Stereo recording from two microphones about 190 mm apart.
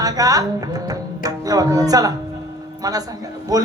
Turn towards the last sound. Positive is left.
turn(degrees=-20)  # may be behind; listen again after turning